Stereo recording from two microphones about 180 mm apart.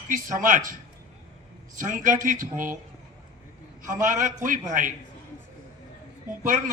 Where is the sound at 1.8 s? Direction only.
45° right (ahead or behind).